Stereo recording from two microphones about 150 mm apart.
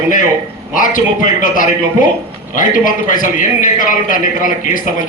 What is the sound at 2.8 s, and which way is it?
A man's voice, 65° left (ahead or behind).